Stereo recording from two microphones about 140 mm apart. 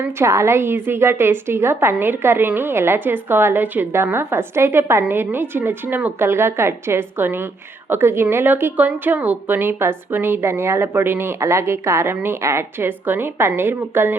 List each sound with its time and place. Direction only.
0.0 s a woman's voice: 20° right (ahead or behind)